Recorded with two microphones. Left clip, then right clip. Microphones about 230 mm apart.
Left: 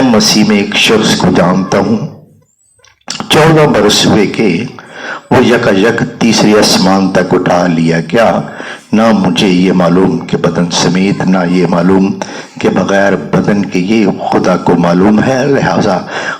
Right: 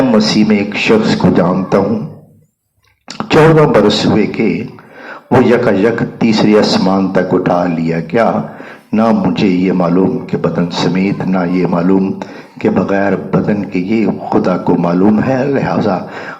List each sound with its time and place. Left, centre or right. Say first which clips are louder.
0.1 s a man's voice: left 3 dB; left
3.1 s a man's voice: left 1 dB; left